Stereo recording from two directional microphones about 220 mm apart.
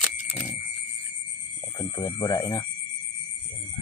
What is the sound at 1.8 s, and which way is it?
Speech, 20° left (ahead or behind).